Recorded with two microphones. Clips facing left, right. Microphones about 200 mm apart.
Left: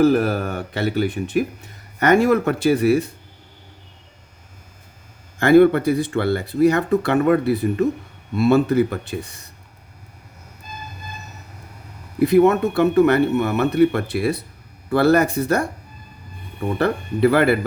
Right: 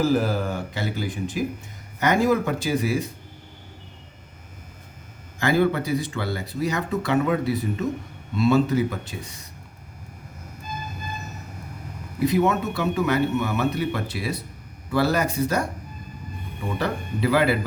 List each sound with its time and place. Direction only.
0.0 s speech: 65° left (ahead or behind)
5.4 s speech: 60° left (ahead or behind)
12.2 s speech: 60° left (ahead or behind)
16.7 s speech: 60° left (ahead or behind)